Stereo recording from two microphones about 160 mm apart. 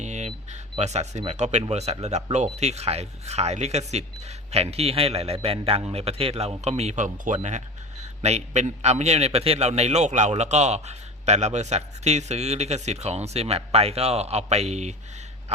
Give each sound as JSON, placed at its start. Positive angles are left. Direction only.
{"t": 0.0, "sound": "cash register", "side_deg": -45}
{"t": 1.7, "sound": "a man's voice", "side_deg": -45}